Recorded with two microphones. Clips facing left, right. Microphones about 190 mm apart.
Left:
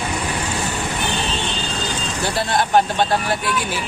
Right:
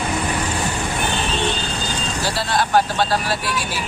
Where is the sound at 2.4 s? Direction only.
20° left (ahead or behind).